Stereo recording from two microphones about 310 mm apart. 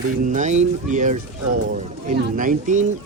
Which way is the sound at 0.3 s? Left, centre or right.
Right.